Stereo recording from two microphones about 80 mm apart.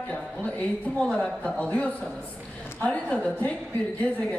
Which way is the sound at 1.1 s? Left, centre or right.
Centre.